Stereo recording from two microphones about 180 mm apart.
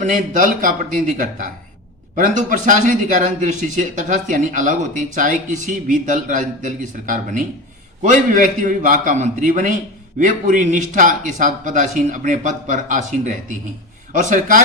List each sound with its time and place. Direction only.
0.0 s a man's voice: 45° right (ahead or behind)